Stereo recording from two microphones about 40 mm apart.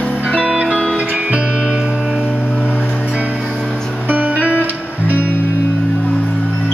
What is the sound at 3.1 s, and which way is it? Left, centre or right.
Music, right.